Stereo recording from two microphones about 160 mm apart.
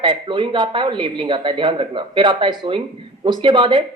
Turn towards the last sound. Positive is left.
turn(degrees=-30)  # may be behind; listen again after turning